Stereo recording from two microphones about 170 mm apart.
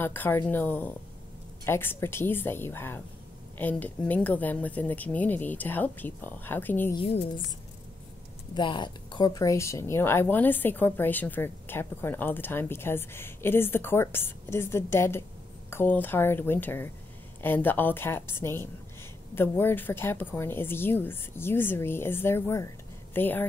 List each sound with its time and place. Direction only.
0.0 s a woman's voice: 10° left (ahead or behind)
7.0 s speech: 35° left (ahead or behind)
8.5 s a woman's voice: 25° left (ahead or behind); by 23.4 s 10° left (ahead or behind)